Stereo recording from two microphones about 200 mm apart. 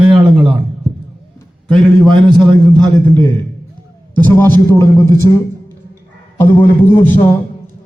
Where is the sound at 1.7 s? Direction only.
5° left (ahead or behind).